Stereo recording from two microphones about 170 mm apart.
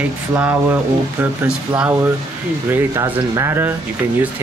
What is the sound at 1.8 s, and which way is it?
Speech, 10° right (ahead or behind).